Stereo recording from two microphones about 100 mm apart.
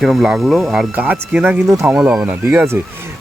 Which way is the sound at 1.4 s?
20° right (ahead or behind).